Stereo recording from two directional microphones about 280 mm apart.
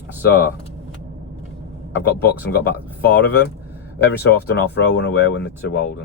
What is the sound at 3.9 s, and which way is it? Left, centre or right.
Speech, left.